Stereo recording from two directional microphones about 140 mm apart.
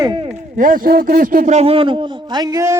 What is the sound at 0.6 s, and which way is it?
Speech, 75° right (ahead or behind).